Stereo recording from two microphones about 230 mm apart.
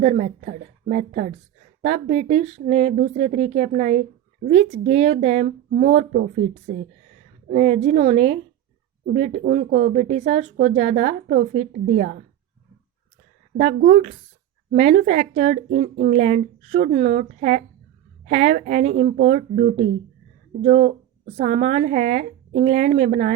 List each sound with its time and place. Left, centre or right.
0.0 s a woman's voice: right
7.4 s a woman's voice: right
13.6 s a woman's voice: right
21.4 s speech: right